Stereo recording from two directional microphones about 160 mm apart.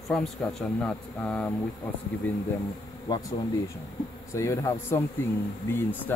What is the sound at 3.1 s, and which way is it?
Speech, 25° left (ahead or behind).